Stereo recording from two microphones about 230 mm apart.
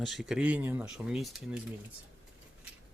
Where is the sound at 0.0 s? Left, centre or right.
Centre.